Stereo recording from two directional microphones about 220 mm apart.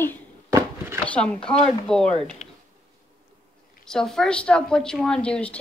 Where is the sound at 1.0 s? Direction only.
5° left (ahead or behind).